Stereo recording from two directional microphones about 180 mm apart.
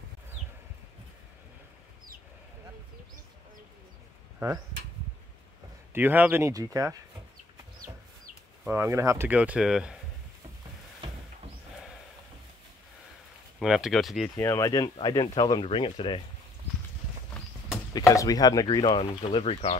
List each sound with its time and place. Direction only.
5.9 s speech: 10° right (ahead or behind)
8.6 s speech: 15° right (ahead or behind)
13.6 s speech: 5° right (ahead or behind)
14.3 s speech: 15° left (ahead or behind)
17.9 s speech: 20° left (ahead or behind); by 19.8 s 35° left (ahead or behind)